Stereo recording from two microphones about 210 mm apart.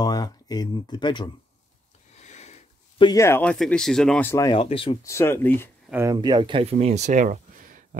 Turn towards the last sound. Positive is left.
turn(degrees=-40)  # may be behind; listen again after turning